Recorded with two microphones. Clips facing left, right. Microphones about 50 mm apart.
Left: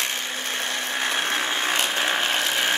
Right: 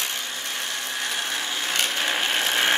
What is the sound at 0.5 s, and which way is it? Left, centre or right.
Tools, left.